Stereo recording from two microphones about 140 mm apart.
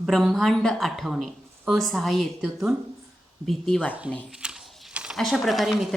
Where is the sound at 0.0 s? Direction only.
Centre (ahead or behind).